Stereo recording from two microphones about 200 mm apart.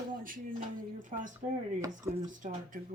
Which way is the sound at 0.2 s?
45° right (ahead or behind).